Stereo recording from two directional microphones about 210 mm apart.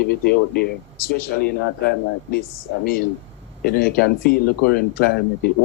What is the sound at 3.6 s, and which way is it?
Speech, 45° left (ahead or behind).